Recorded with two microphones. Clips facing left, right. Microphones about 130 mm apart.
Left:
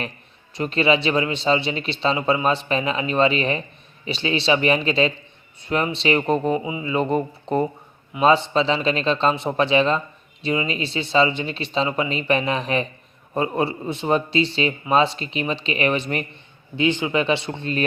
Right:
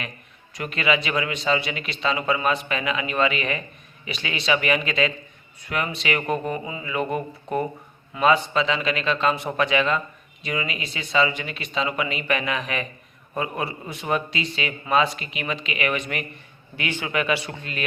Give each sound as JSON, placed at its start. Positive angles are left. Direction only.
{"t": 0.5, "sound": "speech", "side_deg": 30}
{"t": 16.7, "sound": "speech", "side_deg": 20}